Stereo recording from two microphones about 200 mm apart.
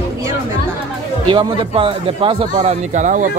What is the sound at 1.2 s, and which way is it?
A man's voice, 25° right (ahead or behind).